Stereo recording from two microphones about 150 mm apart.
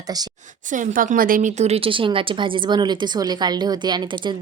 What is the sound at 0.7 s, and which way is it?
A woman's voice, 60° right (ahead or behind).